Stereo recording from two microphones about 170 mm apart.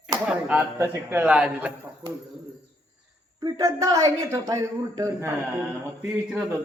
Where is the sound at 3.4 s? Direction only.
20° right (ahead or behind).